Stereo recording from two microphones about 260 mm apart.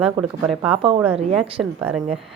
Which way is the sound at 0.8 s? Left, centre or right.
Right.